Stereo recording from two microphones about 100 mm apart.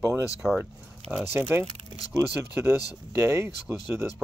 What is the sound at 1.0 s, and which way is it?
Speech, 80° right.